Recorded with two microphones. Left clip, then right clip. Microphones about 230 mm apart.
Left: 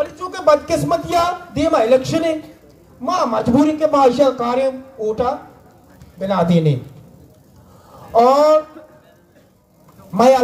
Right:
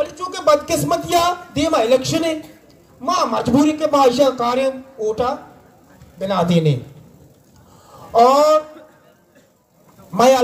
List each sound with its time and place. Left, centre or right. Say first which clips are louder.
0.0 s a man's voice: left 1 dB; right
7.9 s a man's voice: even; right
10.1 s a man's voice: left 1 dB; right